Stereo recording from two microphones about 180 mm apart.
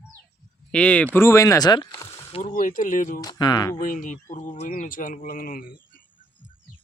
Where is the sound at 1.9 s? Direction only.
15° left (ahead or behind).